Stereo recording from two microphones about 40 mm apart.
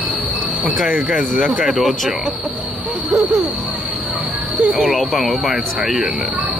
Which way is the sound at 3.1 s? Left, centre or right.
Centre.